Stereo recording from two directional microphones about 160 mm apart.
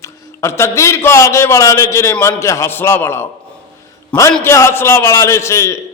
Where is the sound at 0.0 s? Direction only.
15° left (ahead or behind).